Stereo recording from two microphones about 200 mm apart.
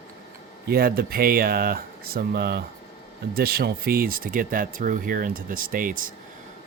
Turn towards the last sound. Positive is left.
turn(degrees=-45)  # may be behind; listen again after turning